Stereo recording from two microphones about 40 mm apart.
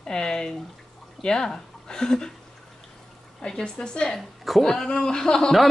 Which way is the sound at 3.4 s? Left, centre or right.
Centre.